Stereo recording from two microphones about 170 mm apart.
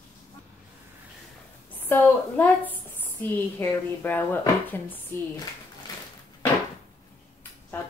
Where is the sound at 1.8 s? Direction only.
15° left (ahead or behind).